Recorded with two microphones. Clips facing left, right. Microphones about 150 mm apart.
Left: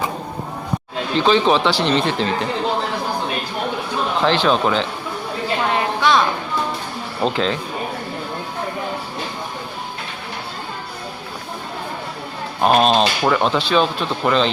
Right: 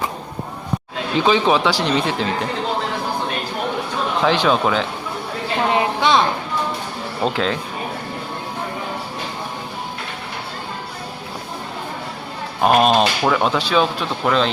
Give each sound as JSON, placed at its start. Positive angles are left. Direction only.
{"t": 1.1, "sound": "speech", "side_deg": -10}
{"t": 4.2, "sound": "speech", "side_deg": -5}
{"t": 6.0, "sound": "a woman's voice", "side_deg": -20}
{"t": 7.2, "sound": "speech", "side_deg": -5}
{"t": 12.6, "sound": "speech", "side_deg": -10}